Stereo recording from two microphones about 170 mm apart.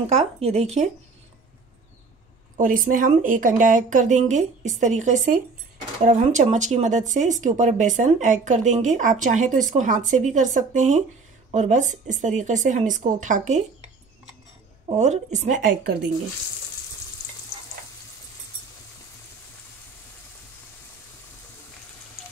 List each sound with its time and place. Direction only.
0.0 s speech: 35° right (ahead or behind)
2.5 s speech: 50° right (ahead or behind)
14.9 s speech: 45° right (ahead or behind)